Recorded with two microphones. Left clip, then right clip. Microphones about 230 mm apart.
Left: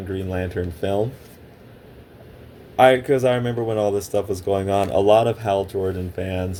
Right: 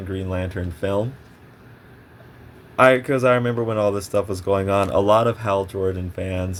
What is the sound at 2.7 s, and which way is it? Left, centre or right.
Speech, right.